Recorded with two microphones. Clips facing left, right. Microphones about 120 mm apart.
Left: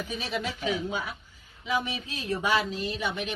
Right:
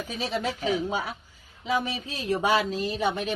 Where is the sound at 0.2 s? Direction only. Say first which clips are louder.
Right 7 dB; 35° right (ahead or behind).